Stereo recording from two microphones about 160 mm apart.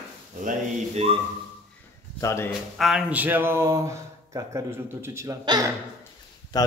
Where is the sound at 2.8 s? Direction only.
5° right (ahead or behind); by 5.7 s 20° right (ahead or behind).